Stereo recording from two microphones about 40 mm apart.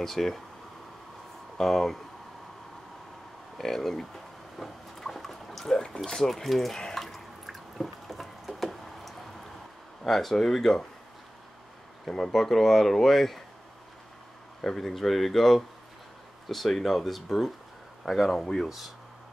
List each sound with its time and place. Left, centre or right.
0.0 s speech: centre
1.6 s speech: centre
3.5 s speech: centre
4.6 s a sound: centre
6.0 s speech: centre
6.7 s water: centre
7.4 s liquid: centre
10.0 s speech: centre
12.3 s speech: centre
14.8 s speech: centre